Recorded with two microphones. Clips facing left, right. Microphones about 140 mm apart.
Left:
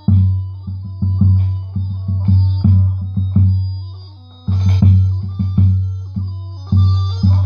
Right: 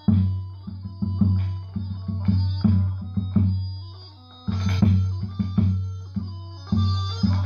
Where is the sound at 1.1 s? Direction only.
25° left (ahead or behind).